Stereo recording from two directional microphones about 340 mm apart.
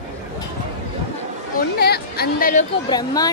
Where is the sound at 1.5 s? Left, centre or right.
Left.